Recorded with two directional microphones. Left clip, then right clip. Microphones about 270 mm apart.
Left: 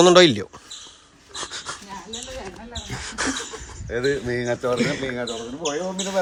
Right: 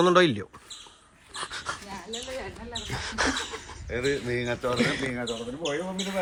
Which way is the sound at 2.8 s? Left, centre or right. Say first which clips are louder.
Left 1 dB; centre.